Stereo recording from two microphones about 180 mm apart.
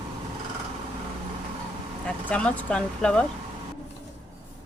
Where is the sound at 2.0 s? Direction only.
5° left (ahead or behind).